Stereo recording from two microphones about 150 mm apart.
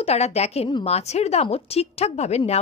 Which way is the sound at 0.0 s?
45° left (ahead or behind).